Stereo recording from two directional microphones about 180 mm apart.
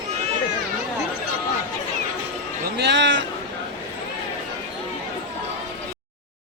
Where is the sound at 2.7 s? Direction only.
70° right (ahead or behind).